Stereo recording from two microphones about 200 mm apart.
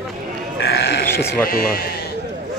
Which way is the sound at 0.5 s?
55° left (ahead or behind).